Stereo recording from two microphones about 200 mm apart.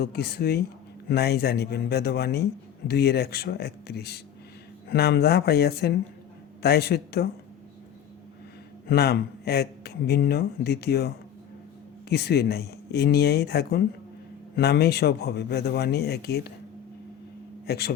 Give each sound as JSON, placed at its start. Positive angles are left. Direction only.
{"t": 0.0, "sound": "a man's voice", "side_deg": 55}
{"t": 8.9, "sound": "a man's voice", "side_deg": 55}
{"t": 17.7, "sound": "a man's voice", "side_deg": 50}